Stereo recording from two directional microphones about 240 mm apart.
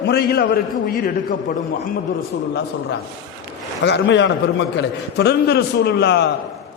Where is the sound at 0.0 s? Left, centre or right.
Left.